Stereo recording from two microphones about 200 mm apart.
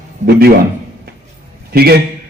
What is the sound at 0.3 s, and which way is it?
Speech, 50° right (ahead or behind).